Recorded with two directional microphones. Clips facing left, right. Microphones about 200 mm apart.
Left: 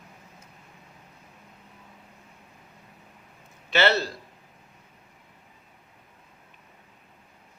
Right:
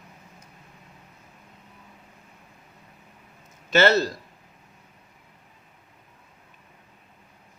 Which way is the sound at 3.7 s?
45° right (ahead or behind).